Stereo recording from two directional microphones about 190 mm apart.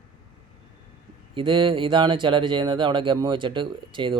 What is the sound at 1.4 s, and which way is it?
Speech, 25° right (ahead or behind).